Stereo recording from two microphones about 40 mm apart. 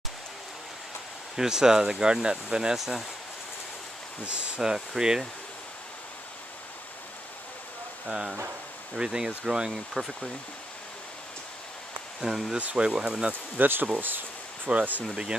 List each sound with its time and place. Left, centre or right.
1.3 s speech: centre
2.8 s speech: centre
4.2 s speech: right
4.6 s speech: centre
8.1 s speech: centre
12.2 s speech: centre
12.7 s speech: right
13.6 s speech: right
14.7 s speech: right